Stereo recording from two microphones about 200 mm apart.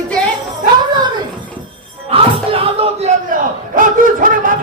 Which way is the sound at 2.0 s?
30° right (ahead or behind).